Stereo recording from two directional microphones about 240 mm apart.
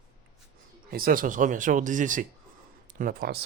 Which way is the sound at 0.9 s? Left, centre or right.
Right.